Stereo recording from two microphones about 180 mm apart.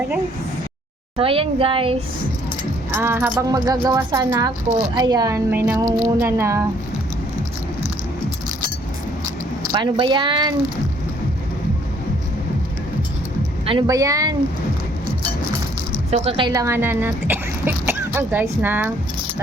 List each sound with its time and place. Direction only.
1.1 s a woman's voice: 30° right (ahead or behind)
2.9 s speech: 10° right (ahead or behind)
3.4 s speech: 20° right (ahead or behind)
9.7 s speech: 25° right (ahead or behind)
13.7 s speech: 20° right (ahead or behind)
16.0 s speech: 35° right (ahead or behind)
16.5 s speech: 15° right (ahead or behind)